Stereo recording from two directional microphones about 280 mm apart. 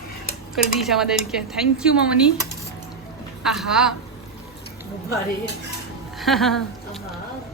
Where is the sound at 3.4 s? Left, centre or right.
Centre.